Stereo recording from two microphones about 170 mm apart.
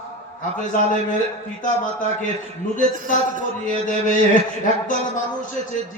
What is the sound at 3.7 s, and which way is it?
Music, 50° left (ahead or behind).